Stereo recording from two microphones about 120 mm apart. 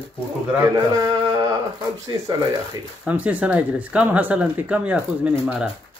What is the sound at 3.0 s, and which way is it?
Speech, 10° right (ahead or behind).